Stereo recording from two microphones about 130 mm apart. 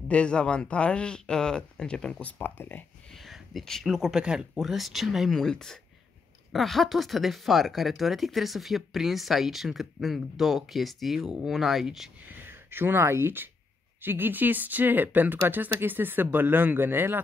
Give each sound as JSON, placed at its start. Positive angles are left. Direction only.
{"t": 0.1, "sound": "speech", "side_deg": 10}
{"t": 3.1, "sound": "speech", "side_deg": 0}
{"t": 12.3, "sound": "speech", "side_deg": -15}